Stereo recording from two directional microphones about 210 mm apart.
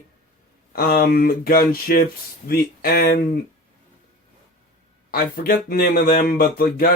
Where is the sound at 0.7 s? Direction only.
45° left (ahead or behind).